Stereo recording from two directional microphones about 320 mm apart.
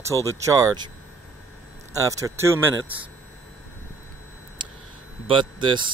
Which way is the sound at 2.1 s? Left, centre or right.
Centre.